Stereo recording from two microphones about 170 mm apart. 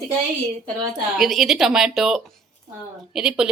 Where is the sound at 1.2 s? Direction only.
Centre (ahead or behind).